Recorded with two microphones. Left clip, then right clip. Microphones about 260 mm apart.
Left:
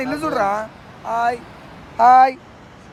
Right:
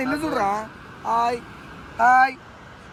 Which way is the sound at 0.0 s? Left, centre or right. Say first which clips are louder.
Left 3 dB; centre.